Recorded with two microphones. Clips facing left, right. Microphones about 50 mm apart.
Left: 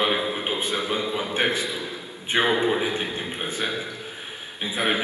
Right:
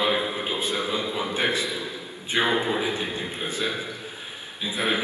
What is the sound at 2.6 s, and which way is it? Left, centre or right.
A man's voice, left.